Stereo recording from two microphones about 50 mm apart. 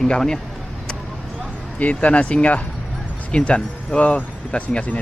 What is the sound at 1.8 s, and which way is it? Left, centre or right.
Speech, left.